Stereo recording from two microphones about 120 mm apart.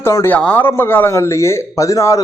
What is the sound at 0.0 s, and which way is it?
Speech, 20° left (ahead or behind).